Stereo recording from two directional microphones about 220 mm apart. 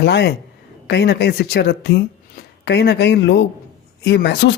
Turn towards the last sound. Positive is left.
turn(degrees=50)  # may be behind; listen again after turning